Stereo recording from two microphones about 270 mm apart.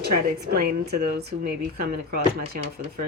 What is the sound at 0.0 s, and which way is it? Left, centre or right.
Speech, right.